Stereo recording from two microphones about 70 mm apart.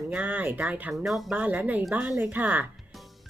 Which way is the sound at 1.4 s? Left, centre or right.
Right.